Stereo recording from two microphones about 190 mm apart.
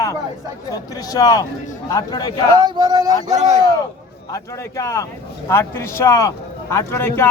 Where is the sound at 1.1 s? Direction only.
20° left (ahead or behind).